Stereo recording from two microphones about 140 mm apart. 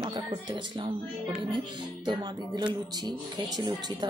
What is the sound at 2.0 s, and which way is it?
A woman's voice, 35° right (ahead or behind).